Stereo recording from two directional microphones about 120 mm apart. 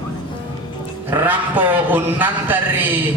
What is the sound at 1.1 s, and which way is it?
Speech, 15° right (ahead or behind).